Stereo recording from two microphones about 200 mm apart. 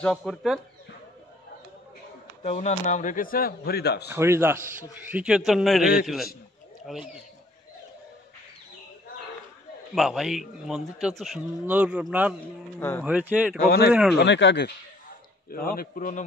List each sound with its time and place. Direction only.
0.0 s speech: 5° left (ahead or behind)
2.4 s speech: 35° left (ahead or behind); by 4.1 s 55° left (ahead or behind)
4.1 s speech: 15° right (ahead or behind)
6.9 s speech: centre (ahead or behind)
9.9 s speech: centre (ahead or behind)
13.7 s speech: 50° left (ahead or behind)
15.5 s speech: 45° left (ahead or behind)